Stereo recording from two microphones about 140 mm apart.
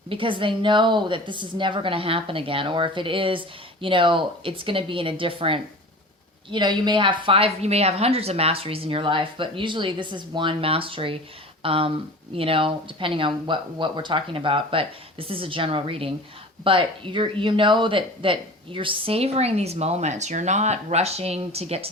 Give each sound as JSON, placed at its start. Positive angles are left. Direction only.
{"t": 0.1, "sound": "a woman's voice", "side_deg": -40}